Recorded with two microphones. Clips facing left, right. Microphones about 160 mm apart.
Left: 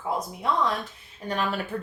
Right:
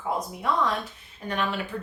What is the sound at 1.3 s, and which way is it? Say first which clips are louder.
Speech: left 1 dB; 35° left (ahead or behind).